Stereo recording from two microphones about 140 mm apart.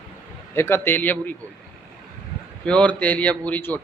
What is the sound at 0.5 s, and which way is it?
Speech, 15° left (ahead or behind).